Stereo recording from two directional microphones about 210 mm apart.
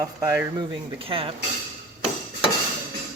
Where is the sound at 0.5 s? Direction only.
25° right (ahead or behind).